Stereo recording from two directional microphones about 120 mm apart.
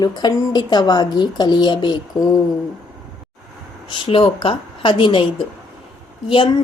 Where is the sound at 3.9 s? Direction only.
45° left (ahead or behind).